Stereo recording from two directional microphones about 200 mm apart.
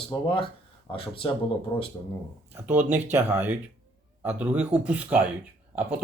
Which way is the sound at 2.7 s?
10° right (ahead or behind).